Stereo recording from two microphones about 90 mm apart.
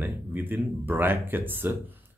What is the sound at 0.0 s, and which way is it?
Speech, 20° right (ahead or behind).